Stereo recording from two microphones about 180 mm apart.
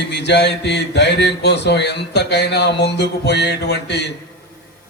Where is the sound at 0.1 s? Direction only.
70° left (ahead or behind).